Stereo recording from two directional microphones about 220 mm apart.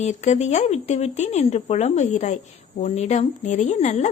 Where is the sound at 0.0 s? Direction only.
30° left (ahead or behind).